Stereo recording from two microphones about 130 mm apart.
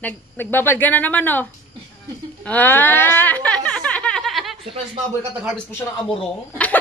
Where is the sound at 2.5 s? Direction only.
15° left (ahead or behind).